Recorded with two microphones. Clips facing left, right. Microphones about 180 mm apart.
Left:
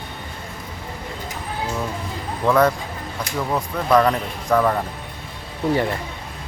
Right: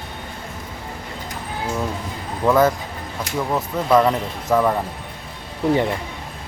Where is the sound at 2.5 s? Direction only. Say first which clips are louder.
Right 1 dB; 5° right (ahead or behind).